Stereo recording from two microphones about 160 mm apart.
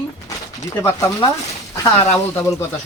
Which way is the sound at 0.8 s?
20° left (ahead or behind).